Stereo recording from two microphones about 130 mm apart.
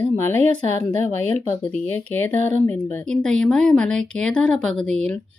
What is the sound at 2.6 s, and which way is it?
Speech, 10° left (ahead or behind).